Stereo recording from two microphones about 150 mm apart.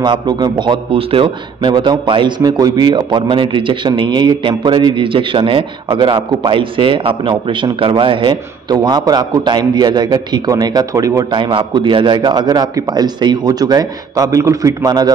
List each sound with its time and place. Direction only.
0.0 s a man's voice: 30° right (ahead or behind)